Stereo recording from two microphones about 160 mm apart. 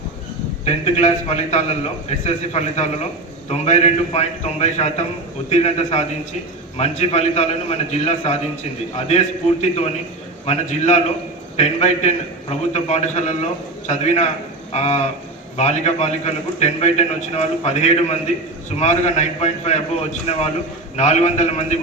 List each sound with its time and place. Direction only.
0.6 s a man's voice: 45° left (ahead or behind)